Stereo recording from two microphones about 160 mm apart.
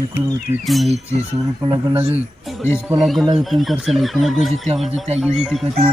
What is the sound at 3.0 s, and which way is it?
Speech, centre (ahead or behind).